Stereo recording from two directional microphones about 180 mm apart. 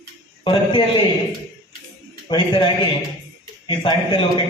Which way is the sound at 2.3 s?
25° left (ahead or behind).